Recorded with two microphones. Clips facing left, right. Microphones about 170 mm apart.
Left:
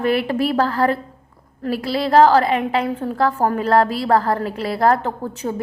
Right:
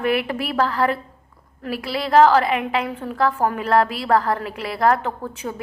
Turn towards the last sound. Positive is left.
turn(degrees=30)  # may be behind; listen again after turning